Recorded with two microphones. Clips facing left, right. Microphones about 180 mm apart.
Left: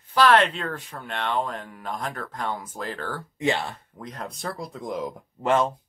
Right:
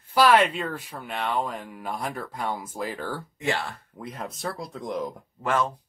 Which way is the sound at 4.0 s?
5° right (ahead or behind).